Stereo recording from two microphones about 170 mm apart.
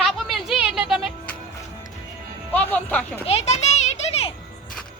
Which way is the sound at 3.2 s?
40° left (ahead or behind).